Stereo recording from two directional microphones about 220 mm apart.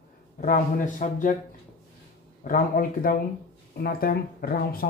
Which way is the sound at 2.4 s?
40° left (ahead or behind).